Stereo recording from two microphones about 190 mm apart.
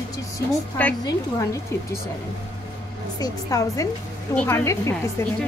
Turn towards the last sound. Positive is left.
turn(degrees=15)  # may be behind; listen again after turning